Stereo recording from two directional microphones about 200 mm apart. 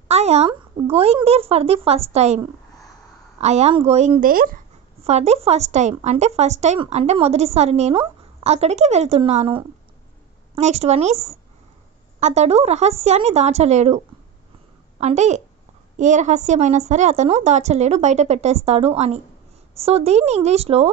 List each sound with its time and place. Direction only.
0.1 s speech: 30° right (ahead or behind)
5.0 s speech: 35° right (ahead or behind)